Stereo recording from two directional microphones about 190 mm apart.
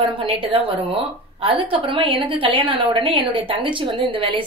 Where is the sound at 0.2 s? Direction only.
30° right (ahead or behind).